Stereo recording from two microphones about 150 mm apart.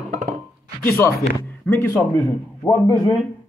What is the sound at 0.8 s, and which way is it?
A man's voice, 15° left (ahead or behind).